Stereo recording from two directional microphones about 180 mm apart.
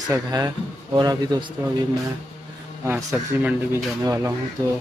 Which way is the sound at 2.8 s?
10° right (ahead or behind).